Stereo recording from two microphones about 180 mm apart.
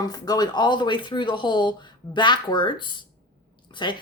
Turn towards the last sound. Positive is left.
turn(degrees=25)  # may be behind; listen again after turning